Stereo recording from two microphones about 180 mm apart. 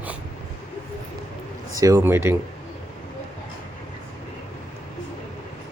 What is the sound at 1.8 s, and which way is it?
Speech, 20° right (ahead or behind).